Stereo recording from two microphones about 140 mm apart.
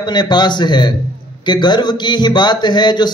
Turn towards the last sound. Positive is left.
turn(degrees=30)  # may be behind; listen again after turning